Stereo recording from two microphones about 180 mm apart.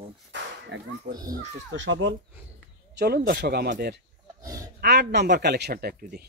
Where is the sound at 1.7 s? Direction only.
90° right.